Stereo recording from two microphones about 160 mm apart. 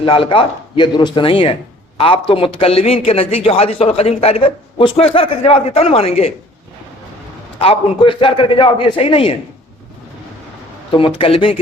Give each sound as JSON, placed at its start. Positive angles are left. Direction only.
{"t": 0.0, "sound": "a man's voice", "side_deg": 35}
{"t": 7.6, "sound": "a man's voice", "side_deg": 35}
{"t": 10.9, "sound": "a man's voice", "side_deg": 35}